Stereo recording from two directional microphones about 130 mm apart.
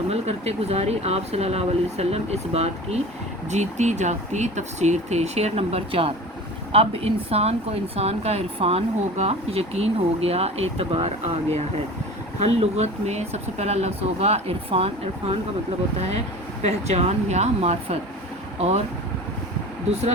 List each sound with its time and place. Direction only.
0.1 s a woman's voice: 55° right (ahead or behind)
16.6 s speech: 55° right (ahead or behind)